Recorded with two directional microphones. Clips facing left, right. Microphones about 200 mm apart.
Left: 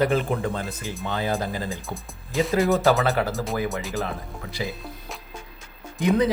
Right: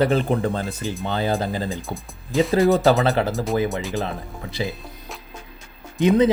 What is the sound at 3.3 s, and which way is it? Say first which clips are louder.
Speech: right 5 dB; centre (ahead or behind).